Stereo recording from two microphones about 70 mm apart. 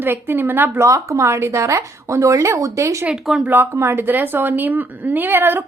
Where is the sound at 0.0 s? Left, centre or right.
Right.